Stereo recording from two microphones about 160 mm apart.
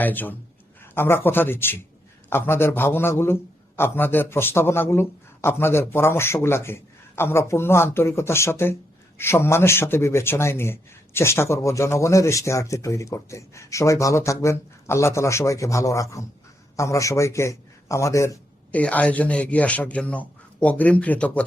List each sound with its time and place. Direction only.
0.0 s a man's voice: 10° left (ahead or behind)